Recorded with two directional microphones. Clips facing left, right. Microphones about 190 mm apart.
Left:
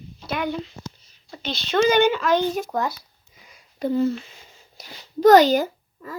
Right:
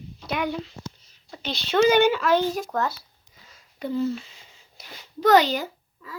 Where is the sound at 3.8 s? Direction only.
50° left (ahead or behind).